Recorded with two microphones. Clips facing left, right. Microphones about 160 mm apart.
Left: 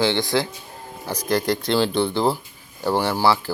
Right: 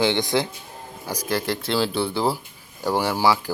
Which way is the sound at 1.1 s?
5° right (ahead or behind).